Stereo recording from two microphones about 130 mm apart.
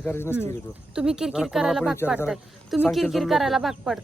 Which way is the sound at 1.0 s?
5° right (ahead or behind).